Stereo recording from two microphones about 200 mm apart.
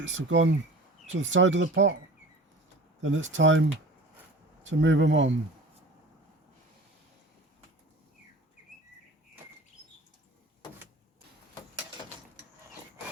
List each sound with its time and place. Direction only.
0.0 s speech: 70° right (ahead or behind)
3.0 s speech: 70° right (ahead or behind)
4.6 s speech: 65° right (ahead or behind)